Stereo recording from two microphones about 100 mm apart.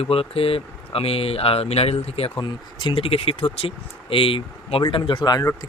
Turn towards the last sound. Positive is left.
turn(degrees=45)  # may be behind; listen again after turning